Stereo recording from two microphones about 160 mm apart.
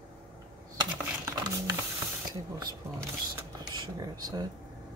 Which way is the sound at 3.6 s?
25° right (ahead or behind).